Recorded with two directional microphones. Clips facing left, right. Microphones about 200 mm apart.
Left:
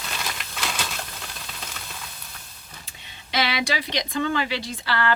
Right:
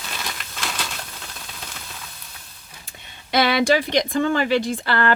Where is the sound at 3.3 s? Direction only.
50° right (ahead or behind).